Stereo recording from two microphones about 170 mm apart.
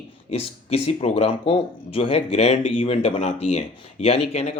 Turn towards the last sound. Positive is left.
turn(degrees=35)  # may be behind; listen again after turning